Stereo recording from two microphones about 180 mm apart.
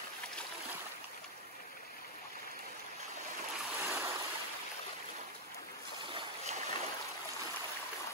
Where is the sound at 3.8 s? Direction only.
10° right (ahead or behind).